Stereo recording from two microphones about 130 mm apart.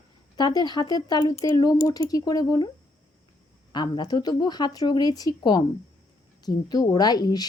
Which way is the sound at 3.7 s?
35° left (ahead or behind).